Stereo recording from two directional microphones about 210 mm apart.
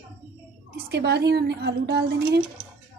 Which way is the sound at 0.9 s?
50° right (ahead or behind).